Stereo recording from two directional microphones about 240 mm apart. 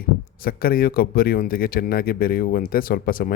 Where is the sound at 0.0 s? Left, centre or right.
Left.